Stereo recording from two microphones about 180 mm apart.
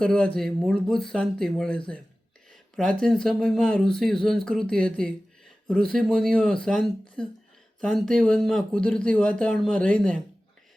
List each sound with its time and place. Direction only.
0.0 s speech: 5° left (ahead or behind)